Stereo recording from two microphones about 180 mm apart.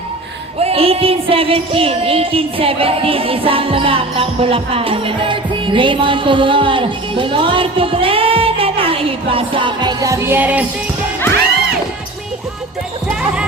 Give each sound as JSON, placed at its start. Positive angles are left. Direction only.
{"t": 0.6, "sound": "music", "side_deg": -30}